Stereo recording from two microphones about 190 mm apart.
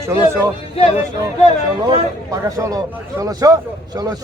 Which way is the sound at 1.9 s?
20° right (ahead or behind).